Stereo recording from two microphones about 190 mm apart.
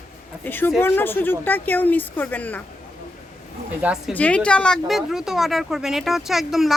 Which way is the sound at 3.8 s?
5° right (ahead or behind).